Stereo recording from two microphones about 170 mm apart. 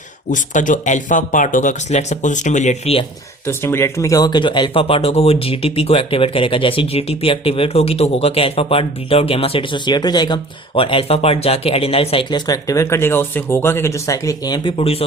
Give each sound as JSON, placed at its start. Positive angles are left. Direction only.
{"t": 0.3, "sound": "speech", "side_deg": 50}
{"t": 3.4, "sound": "speech", "side_deg": 15}
{"t": 12.5, "sound": "speech", "side_deg": 20}